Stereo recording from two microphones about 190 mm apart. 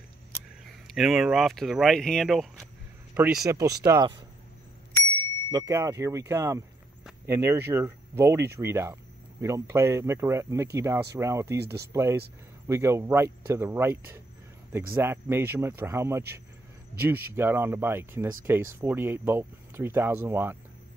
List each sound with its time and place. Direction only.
0.8 s speech: centre (ahead or behind)
3.4 s speech: 15° right (ahead or behind)
5.5 s speech: 15° right (ahead or behind)
11.5 s speech: 60° right (ahead or behind)
11.9 s speech: 15° right (ahead or behind)